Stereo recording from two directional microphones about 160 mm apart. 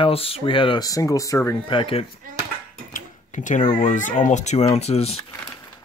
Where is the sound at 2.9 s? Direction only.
50° left (ahead or behind).